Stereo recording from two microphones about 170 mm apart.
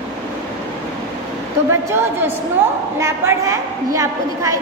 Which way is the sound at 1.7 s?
15° right (ahead or behind).